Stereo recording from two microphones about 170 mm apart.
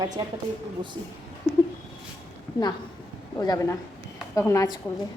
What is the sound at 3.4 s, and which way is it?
A woman's voice, 20° left (ahead or behind).